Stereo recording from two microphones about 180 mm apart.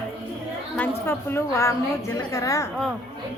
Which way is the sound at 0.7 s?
10° left (ahead or behind).